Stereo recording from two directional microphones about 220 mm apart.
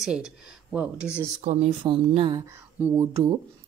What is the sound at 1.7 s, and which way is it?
Speech, 20° right (ahead or behind).